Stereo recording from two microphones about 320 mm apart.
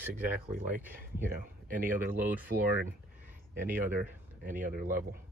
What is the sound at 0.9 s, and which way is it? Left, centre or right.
Speech, right.